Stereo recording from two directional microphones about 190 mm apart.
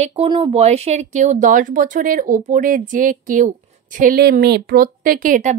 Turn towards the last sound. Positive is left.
turn(degrees=-45)  # may be behind; listen again after turning